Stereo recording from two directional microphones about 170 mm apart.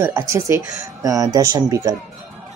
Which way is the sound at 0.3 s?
15° right (ahead or behind).